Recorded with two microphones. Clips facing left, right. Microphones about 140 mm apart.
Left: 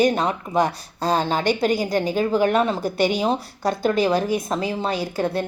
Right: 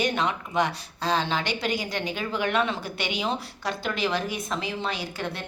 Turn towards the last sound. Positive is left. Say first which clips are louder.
# left 9 dB
turn(degrees=40)  # may be behind; listen again after turning